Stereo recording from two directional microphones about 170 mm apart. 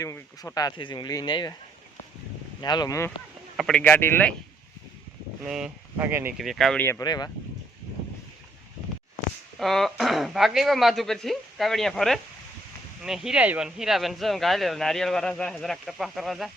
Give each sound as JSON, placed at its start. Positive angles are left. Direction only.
{"t": 0.0, "sound": "speech", "side_deg": 20}
{"t": 2.6, "sound": "speech", "side_deg": 25}
{"t": 3.6, "sound": "speech", "side_deg": 5}
{"t": 5.4, "sound": "speech", "side_deg": -5}
{"t": 6.3, "sound": "speech", "side_deg": 0}
{"t": 7.0, "sound": "speech", "side_deg": 25}
{"t": 9.6, "sound": "speech", "side_deg": 0}